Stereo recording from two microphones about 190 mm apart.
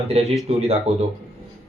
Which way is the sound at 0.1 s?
35° right (ahead or behind).